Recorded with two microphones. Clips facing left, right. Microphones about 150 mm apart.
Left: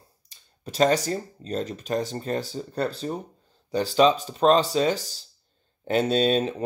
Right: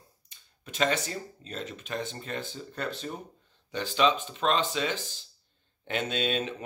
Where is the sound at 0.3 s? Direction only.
40° left (ahead or behind).